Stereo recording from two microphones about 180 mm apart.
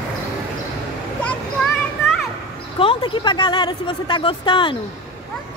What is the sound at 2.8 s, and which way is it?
Speech, 30° left (ahead or behind).